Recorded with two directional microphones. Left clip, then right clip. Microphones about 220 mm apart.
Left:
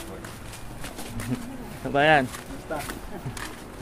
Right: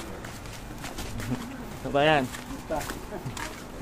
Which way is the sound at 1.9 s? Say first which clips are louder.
Left 3 dB; 15° left (ahead or behind).